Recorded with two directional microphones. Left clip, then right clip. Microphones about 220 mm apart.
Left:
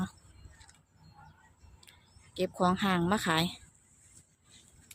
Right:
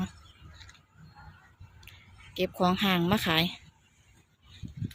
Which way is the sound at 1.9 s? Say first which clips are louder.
Right 8 dB; 10° right (ahead or behind).